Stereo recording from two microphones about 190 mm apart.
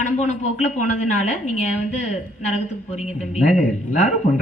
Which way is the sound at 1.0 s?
40° left (ahead or behind).